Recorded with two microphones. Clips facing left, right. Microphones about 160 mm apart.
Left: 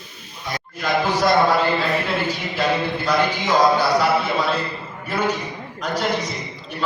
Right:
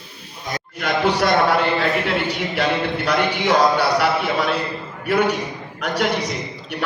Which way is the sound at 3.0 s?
70° right (ahead or behind).